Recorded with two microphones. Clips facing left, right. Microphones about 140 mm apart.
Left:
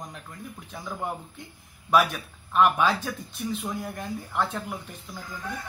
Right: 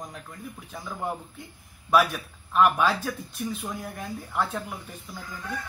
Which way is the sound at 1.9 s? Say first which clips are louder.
Even; 5° right (ahead or behind).